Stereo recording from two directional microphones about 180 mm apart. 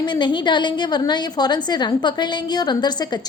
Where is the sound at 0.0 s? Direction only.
25° left (ahead or behind).